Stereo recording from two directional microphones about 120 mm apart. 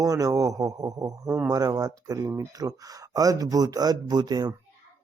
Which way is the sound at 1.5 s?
30° right (ahead or behind).